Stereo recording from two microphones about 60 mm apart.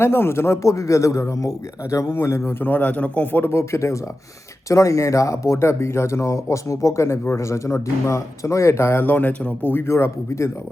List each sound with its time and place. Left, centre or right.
0.0 s speech: left
2.1 s speech: left
2.6 s a man's voice: left
3.4 s speech: left
4.7 s speech: left
9.8 s speech: left